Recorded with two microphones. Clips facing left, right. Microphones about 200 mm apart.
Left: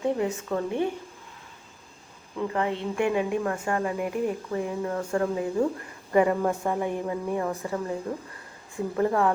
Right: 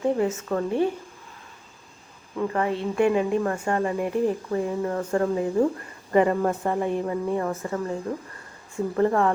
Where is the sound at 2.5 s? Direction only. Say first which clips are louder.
Right 2 dB; 20° left (ahead or behind).